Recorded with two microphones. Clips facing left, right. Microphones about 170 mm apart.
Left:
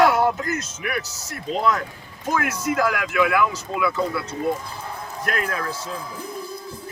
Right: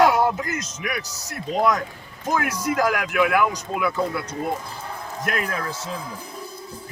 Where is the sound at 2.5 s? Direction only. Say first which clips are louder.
Right 1 dB; 40° right (ahead or behind).